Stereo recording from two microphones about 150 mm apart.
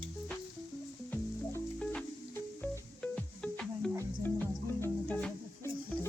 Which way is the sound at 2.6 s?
10° left (ahead or behind).